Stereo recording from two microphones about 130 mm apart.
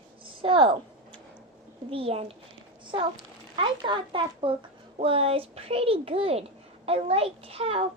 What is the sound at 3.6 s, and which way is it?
A child's voice, 40° right (ahead or behind).